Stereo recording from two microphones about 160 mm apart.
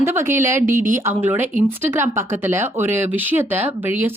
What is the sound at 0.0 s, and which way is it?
Speech, 15° right (ahead or behind).